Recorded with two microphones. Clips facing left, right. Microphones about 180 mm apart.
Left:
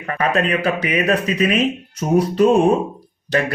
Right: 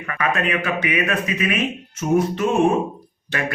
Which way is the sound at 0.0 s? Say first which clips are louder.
Left 4 dB; 35° left (ahead or behind).